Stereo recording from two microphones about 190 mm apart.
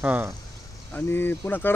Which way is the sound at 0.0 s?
10° right (ahead or behind).